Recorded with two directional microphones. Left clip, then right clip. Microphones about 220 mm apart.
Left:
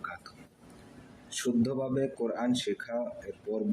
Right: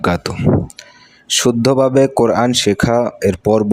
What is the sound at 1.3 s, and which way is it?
Speech, 50° right (ahead or behind).